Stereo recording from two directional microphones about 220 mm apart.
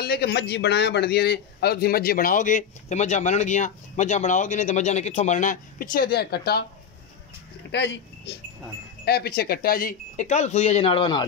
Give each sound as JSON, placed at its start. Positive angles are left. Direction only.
{"t": 0.0, "sound": "a man's voice", "side_deg": 45}
{"t": 7.7, "sound": "a man's voice", "side_deg": 55}